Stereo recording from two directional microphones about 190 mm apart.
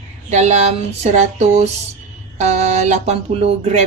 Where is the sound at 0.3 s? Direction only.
35° right (ahead or behind).